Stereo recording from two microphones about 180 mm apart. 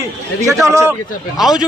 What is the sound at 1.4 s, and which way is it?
Speech, 5° right (ahead or behind).